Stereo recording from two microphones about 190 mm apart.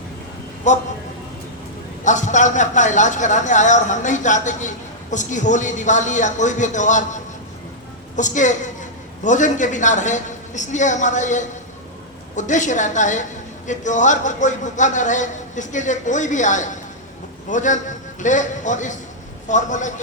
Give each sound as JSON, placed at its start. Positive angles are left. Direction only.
{"t": 0.7, "sound": "a man's voice", "side_deg": 40}
{"t": 2.0, "sound": "a man's voice", "side_deg": 40}